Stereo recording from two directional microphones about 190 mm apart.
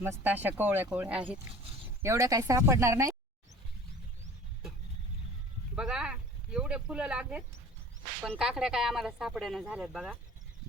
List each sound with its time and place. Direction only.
0.0 s speech: 10° right (ahead or behind)
5.7 s speech: 5° right (ahead or behind)